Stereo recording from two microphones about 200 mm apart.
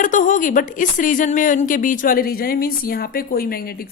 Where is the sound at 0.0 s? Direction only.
40° left (ahead or behind).